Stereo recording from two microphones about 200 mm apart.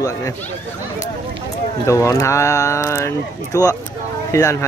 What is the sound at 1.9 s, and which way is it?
Speech, 15° left (ahead or behind).